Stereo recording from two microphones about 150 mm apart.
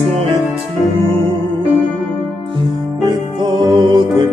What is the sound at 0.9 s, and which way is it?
Music, 40° right (ahead or behind).